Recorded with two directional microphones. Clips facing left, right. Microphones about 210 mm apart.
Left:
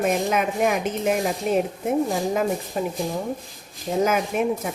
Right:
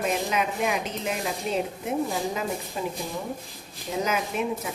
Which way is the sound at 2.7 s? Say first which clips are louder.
Left 4 dB; 55° left (ahead or behind).